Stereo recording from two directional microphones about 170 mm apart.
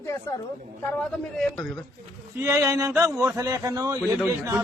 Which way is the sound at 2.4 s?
15° right (ahead or behind).